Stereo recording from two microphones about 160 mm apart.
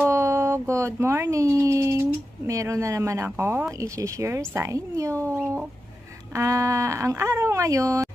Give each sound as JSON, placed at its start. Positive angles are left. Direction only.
{"t": 0.0, "sound": "speech", "side_deg": -20}